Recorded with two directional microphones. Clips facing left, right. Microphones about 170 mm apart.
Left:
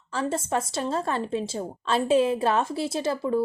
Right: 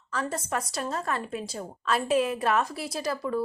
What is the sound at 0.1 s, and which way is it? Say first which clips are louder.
Speech: left 4 dB; 25° left (ahead or behind).